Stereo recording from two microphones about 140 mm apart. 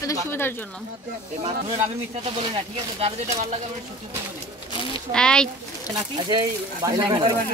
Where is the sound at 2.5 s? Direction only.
45° right (ahead or behind).